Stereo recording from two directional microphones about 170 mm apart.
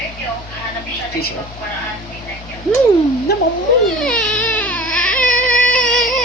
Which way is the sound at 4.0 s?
5° left (ahead or behind).